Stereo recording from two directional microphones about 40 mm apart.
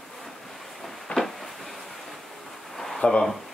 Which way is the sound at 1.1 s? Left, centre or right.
Left.